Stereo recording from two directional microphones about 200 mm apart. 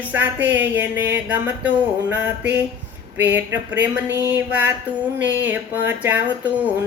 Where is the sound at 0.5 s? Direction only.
10° right (ahead or behind).